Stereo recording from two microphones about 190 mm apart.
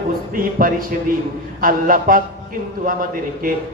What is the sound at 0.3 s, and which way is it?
A man's voice, 50° right (ahead or behind).